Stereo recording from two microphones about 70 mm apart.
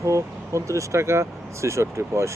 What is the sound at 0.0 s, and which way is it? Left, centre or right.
Speech, right.